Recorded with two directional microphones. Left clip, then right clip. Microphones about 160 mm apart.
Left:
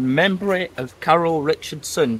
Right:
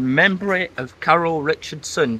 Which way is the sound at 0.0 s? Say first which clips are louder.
Right 2 dB; 25° left (ahead or behind).